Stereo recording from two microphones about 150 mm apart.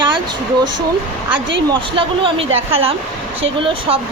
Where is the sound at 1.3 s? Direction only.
35° right (ahead or behind).